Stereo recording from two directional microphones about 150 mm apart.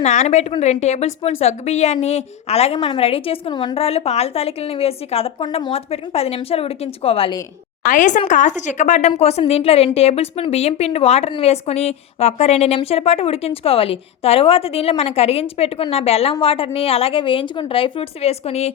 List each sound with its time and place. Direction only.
0.0 s a woman's voice: 50° left (ahead or behind); by 3.8 s 30° left (ahead or behind)
3.8 s a woman's voice: 40° left (ahead or behind)
7.9 s a woman's voice: 55° left (ahead or behind)